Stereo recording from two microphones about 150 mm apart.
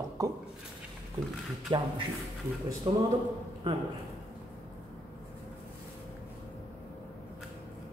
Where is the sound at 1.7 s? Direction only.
35° right (ahead or behind).